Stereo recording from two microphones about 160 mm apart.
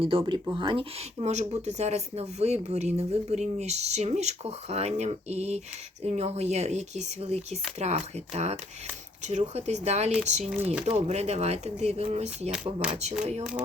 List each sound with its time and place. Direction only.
0.0 s speech: 35° right (ahead or behind)
1.2 s speech: 45° right (ahead or behind)